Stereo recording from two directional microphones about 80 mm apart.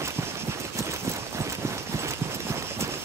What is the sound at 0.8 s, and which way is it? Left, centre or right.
Clip-clop, right.